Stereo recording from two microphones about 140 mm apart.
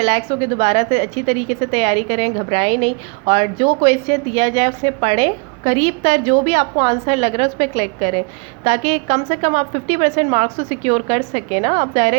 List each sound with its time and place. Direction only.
0.0 s a woman's voice: 45° right (ahead or behind)